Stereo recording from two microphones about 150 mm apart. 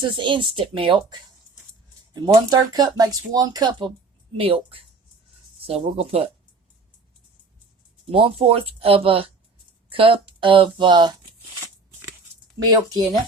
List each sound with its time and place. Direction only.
0.0 s speech: 35° right (ahead or behind)
2.2 s speech: 25° right (ahead or behind)
8.1 s speech: 40° right (ahead or behind)
12.6 s speech: 25° right (ahead or behind)